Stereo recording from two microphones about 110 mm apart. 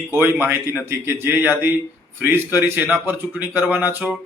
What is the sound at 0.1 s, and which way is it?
A man's voice, 20° right (ahead or behind).